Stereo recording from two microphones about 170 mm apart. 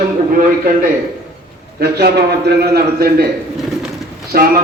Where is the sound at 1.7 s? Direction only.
70° right (ahead or behind).